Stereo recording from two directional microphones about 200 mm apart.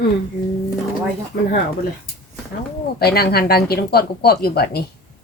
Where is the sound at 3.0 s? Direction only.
50° left (ahead or behind).